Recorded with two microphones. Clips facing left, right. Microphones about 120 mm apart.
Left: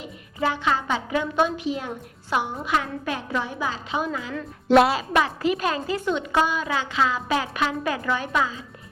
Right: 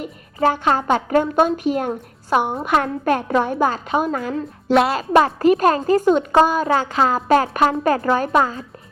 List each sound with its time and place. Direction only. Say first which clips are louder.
0.0 s a woman's voice: right 7 dB; 45° right (ahead or behind)
4.7 s speech: even; centre (ahead or behind)
4.9 s a woman's voice: right 7 dB; 45° right (ahead or behind)